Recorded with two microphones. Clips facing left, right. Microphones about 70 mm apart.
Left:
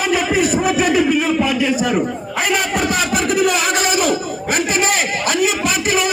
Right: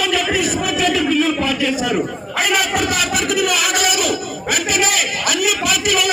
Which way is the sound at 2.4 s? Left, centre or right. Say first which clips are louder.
Even; left.